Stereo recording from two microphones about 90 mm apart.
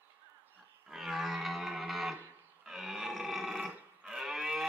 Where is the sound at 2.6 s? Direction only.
5° right (ahead or behind).